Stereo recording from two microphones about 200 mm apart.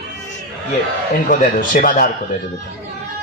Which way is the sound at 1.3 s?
45° left (ahead or behind).